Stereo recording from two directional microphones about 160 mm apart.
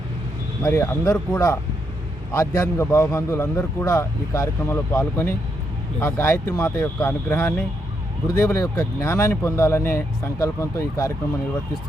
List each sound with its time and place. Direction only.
0.6 s a man's voice: 15° left (ahead or behind)